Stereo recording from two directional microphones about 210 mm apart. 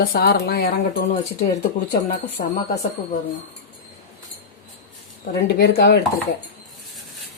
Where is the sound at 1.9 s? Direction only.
40° left (ahead or behind).